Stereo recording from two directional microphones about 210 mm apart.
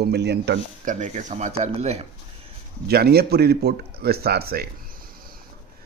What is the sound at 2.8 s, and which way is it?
A man's voice, 50° right (ahead or behind).